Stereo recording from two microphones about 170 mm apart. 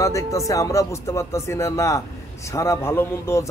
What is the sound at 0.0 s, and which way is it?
A man's voice, 20° left (ahead or behind).